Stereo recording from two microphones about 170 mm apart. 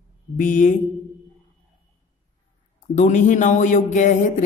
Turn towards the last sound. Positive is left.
turn(degrees=50)  # may be behind; listen again after turning